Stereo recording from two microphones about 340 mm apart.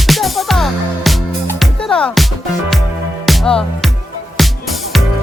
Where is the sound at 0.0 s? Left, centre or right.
Centre.